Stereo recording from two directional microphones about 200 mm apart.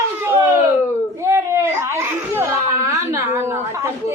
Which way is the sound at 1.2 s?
15° right (ahead or behind).